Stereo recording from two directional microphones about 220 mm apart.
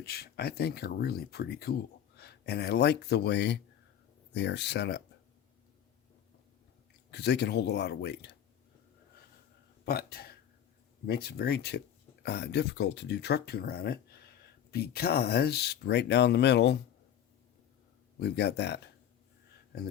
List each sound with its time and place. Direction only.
0.0 s speech: 45° left (ahead or behind)
7.1 s speech: 50° left (ahead or behind)
9.8 s speech: 45° left (ahead or behind)
18.2 s speech: 45° left (ahead or behind)